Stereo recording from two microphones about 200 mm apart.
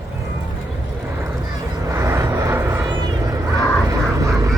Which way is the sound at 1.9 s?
15° right (ahead or behind).